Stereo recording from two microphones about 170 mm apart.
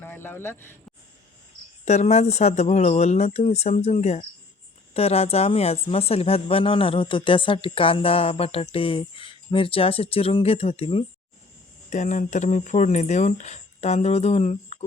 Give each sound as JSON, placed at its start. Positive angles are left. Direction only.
{"t": 0.0, "sound": "speech", "side_deg": 15}
{"t": 1.8, "sound": "a woman's voice", "side_deg": 40}
{"t": 11.9, "sound": "speech", "side_deg": 45}